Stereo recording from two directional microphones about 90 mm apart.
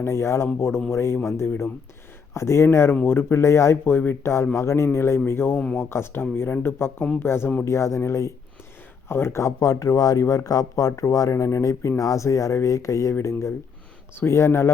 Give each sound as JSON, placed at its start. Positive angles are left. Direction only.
{"t": 0.0, "sound": "speech", "side_deg": 30}